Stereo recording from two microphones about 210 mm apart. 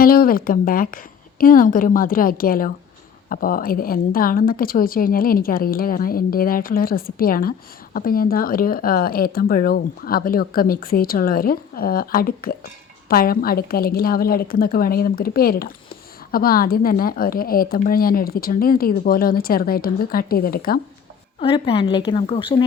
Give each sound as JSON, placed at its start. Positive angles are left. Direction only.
{"t": 0.0, "sound": "a woman's voice", "side_deg": 45}
{"t": 21.3, "sound": "a woman's voice", "side_deg": 25}